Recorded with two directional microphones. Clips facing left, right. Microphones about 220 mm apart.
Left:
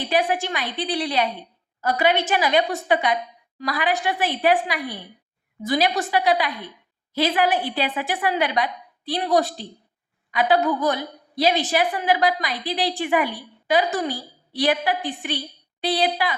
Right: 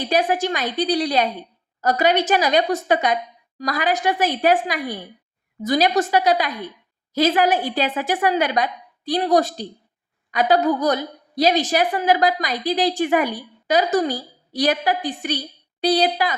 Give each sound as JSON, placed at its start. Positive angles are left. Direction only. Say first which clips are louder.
{"t": 0.1, "sound": "a woman's voice", "louder": "right 3 dB", "side_deg": -40}